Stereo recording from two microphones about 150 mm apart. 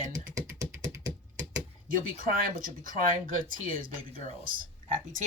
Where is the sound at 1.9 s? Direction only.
70° right (ahead or behind).